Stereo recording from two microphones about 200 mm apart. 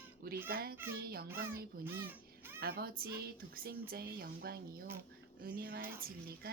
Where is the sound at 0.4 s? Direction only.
50° right (ahead or behind).